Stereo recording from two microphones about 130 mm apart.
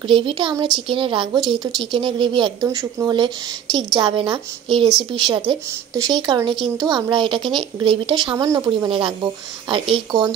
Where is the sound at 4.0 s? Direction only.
40° right (ahead or behind).